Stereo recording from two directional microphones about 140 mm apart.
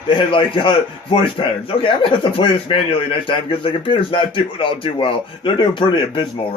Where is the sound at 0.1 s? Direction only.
35° left (ahead or behind).